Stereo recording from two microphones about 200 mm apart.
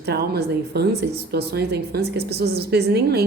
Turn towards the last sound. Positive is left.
turn(degrees=-55)  # may be behind; listen again after turning